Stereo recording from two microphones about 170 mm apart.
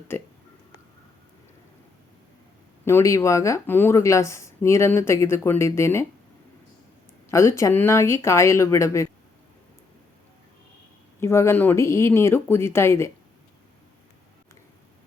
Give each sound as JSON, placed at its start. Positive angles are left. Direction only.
{"t": 2.8, "sound": "speech", "side_deg": 15}
{"t": 7.3, "sound": "speech", "side_deg": 15}
{"t": 11.2, "sound": "speech", "side_deg": 15}